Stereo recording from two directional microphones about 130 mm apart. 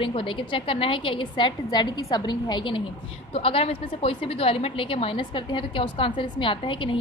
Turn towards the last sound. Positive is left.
turn(degrees=40)  # may be behind; listen again after turning